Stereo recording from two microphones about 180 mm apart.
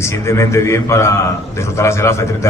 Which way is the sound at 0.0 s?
15° left (ahead or behind).